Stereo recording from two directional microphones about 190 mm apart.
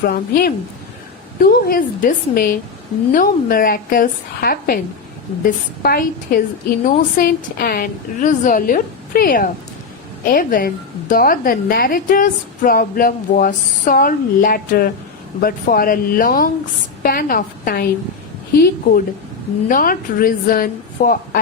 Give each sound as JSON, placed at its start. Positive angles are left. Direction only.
{"t": 0.0, "sound": "a woman's voice", "side_deg": 50}
{"t": 5.8, "sound": "a woman's voice", "side_deg": 50}